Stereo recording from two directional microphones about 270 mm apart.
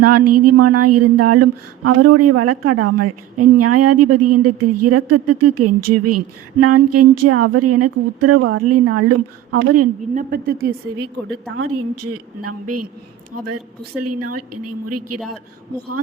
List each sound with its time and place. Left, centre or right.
0.0 s speech: right
10.2 s a woman's voice: right
11.5 s speech: right
14.0 s speech: right